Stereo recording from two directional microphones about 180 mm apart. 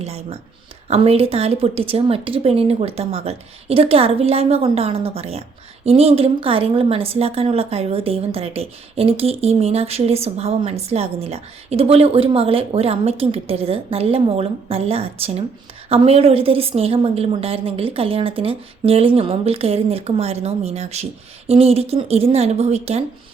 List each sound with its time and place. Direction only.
0.0 s a woman's voice: 35° right (ahead or behind)